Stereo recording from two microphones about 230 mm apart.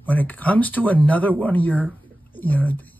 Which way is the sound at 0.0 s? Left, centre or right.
Centre.